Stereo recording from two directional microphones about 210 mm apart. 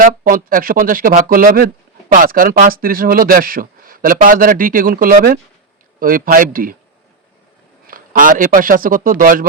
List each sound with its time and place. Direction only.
0.0 s speech: 40° right (ahead or behind)
7.9 s speech: 40° right (ahead or behind)